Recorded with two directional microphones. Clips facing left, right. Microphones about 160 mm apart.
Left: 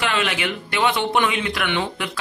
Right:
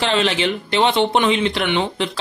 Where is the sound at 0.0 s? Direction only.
30° right (ahead or behind).